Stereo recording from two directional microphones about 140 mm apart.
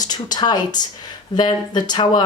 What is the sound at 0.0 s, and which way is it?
Speech, 30° left (ahead or behind).